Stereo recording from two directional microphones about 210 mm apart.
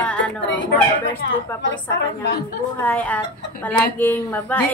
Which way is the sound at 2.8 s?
10° left (ahead or behind).